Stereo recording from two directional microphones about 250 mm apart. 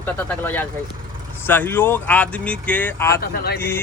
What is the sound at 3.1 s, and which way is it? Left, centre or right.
Speech, left.